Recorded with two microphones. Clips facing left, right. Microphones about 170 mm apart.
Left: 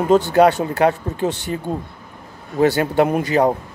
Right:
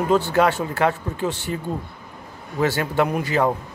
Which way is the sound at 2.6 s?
20° left (ahead or behind).